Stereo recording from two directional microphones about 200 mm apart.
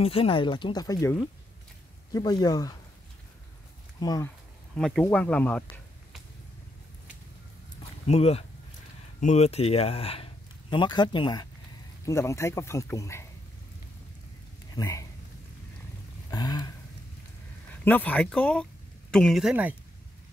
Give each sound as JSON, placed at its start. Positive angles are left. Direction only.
{"t": 0.0, "sound": "speech", "side_deg": 30}
{"t": 2.1, "sound": "speech", "side_deg": 20}
{"t": 4.0, "sound": "speech", "side_deg": 20}
{"t": 4.7, "sound": "speech", "side_deg": 5}
{"t": 8.1, "sound": "a man's voice", "side_deg": 30}
{"t": 14.8, "sound": "speech", "side_deg": 15}
{"t": 16.3, "sound": "speech", "side_deg": 20}
{"t": 17.8, "sound": "speech", "side_deg": 10}